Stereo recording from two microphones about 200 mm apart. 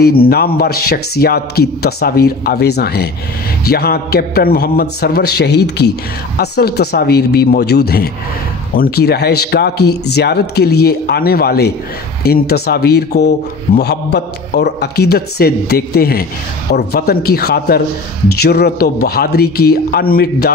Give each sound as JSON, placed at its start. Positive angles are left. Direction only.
{"t": 0.0, "sound": "speech", "side_deg": 50}